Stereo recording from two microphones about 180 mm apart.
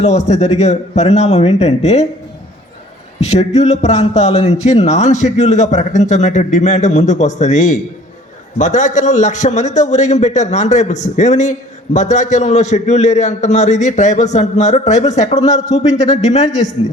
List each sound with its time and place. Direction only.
0.0 s a man's voice: 40° left (ahead or behind)
3.2 s a man's voice: 40° left (ahead or behind)